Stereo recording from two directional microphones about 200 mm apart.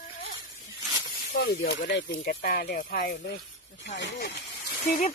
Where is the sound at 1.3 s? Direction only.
55° left (ahead or behind).